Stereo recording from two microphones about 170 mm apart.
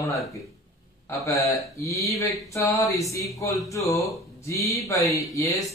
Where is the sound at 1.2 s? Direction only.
20° left (ahead or behind).